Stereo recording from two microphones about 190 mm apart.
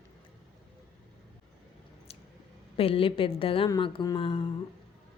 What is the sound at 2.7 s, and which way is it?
A woman's voice, 30° left (ahead or behind).